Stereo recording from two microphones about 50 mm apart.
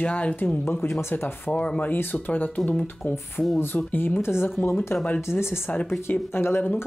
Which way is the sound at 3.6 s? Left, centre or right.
Left.